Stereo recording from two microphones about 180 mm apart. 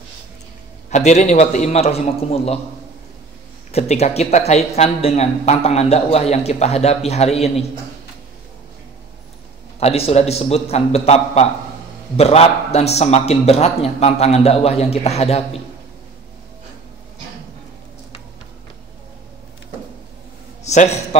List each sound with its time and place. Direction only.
0.8 s speech: 40° left (ahead or behind)
3.7 s speech: 35° left (ahead or behind)
9.8 s speech: 35° left (ahead or behind)
20.6 s speech: 40° left (ahead or behind)